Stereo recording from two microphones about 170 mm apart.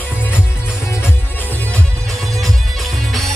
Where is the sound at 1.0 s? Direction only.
10° left (ahead or behind).